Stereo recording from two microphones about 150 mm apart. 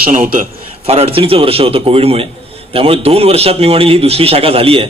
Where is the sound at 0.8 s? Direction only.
40° right (ahead or behind).